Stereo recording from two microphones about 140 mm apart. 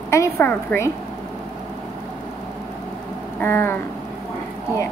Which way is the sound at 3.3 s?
15° left (ahead or behind).